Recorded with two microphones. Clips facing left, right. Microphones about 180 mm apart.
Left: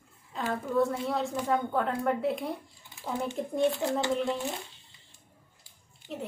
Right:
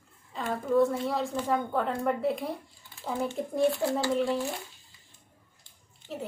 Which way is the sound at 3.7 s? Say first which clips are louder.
Right 1 dB; 20° left (ahead or behind).